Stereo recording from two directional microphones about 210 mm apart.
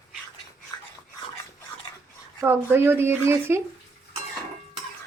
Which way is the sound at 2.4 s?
10° right (ahead or behind).